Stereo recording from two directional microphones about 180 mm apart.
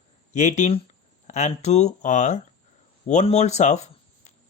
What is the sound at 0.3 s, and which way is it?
Speech, 40° left (ahead or behind).